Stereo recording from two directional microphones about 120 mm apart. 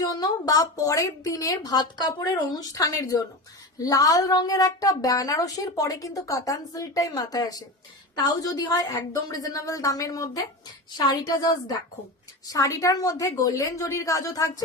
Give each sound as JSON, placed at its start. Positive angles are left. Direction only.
{"t": 0.0, "sound": "a woman's voice", "side_deg": 30}